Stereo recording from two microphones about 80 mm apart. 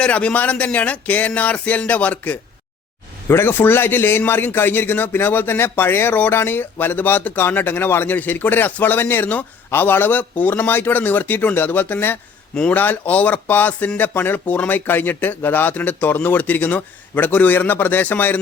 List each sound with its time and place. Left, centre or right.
0.0 s a man's voice: centre